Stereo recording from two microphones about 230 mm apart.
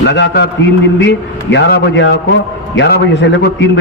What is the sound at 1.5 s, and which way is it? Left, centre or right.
A man's voice, left.